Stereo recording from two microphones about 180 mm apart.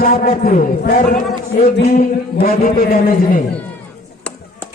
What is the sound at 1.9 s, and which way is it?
A man's voice, 55° left (ahead or behind).